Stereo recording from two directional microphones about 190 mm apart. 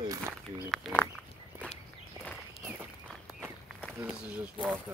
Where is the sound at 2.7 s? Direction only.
10° right (ahead or behind).